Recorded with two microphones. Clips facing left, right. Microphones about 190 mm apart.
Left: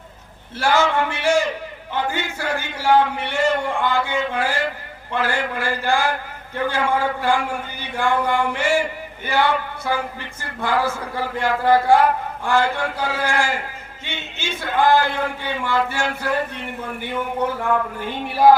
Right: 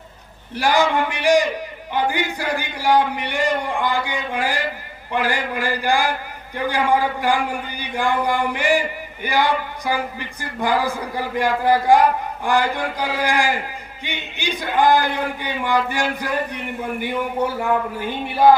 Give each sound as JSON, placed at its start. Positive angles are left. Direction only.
{"t": 0.5, "sound": "a man's voice", "side_deg": -15}
{"t": 18.3, "sound": "music", "side_deg": 0}